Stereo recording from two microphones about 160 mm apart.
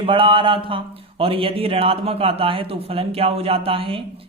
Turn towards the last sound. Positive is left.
turn(degrees=-35)  # may be behind; listen again after turning